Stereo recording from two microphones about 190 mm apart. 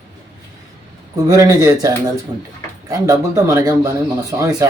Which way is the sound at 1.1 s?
15° right (ahead or behind).